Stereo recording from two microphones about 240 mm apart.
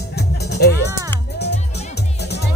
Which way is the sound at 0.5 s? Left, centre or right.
Left.